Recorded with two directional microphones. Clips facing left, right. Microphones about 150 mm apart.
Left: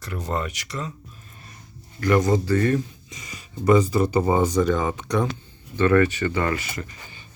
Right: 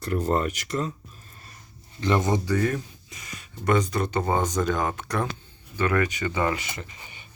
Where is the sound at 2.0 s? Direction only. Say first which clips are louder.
Left 4 dB; 20° right (ahead or behind).